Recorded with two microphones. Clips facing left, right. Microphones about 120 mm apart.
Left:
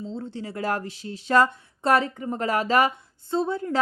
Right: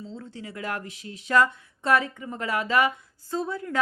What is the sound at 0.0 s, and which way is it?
Speech, 30° left (ahead or behind).